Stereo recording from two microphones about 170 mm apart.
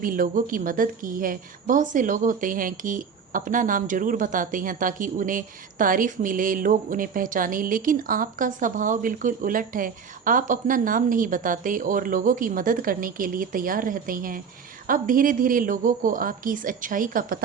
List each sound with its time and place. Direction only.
0.0 s a woman's voice: 55° right (ahead or behind)